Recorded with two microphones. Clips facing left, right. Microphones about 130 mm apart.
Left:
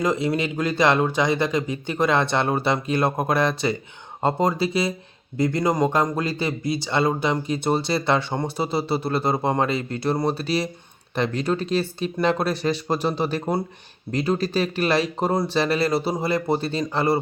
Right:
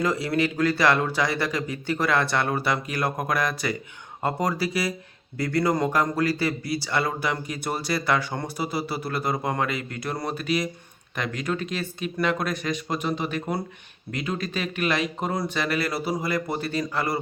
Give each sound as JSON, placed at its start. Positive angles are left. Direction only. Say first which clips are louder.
{"t": 0.0, "sound": "speech", "louder": "left 2 dB", "side_deg": 20}